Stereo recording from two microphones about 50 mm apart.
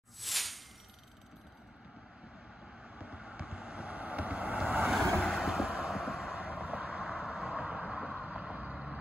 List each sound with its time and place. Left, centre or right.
0.2 s a sound: centre
3.2 s vehicle: centre
5.3 s vehicle: centre
5.9 s vehicle: centre
6.3 s vehicle: right